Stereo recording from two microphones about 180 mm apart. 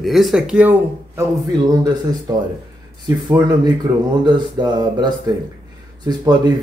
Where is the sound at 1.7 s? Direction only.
20° right (ahead or behind).